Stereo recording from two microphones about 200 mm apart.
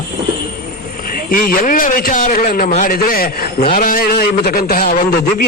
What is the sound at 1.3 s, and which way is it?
A man's voice, 45° left (ahead or behind).